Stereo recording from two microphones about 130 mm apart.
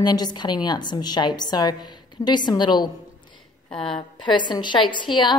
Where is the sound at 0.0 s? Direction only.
35° left (ahead or behind).